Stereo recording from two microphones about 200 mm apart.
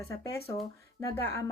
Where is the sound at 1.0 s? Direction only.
10° left (ahead or behind).